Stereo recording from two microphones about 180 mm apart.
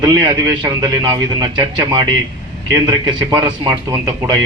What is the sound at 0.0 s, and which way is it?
A man's voice, 20° right (ahead or behind).